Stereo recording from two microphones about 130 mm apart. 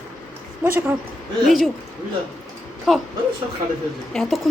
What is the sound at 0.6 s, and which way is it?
Speech, 15° right (ahead or behind).